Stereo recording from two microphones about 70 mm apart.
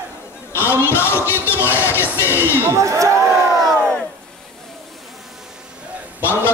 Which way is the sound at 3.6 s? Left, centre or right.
Right.